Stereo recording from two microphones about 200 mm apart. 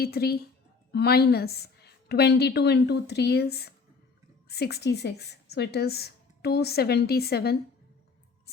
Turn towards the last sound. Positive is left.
turn(degrees=55)  # may be behind; listen again after turning